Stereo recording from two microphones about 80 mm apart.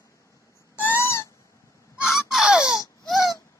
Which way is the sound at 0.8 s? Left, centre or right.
Left.